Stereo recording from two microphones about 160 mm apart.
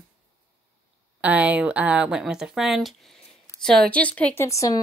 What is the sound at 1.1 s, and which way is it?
Speech, 10° right (ahead or behind).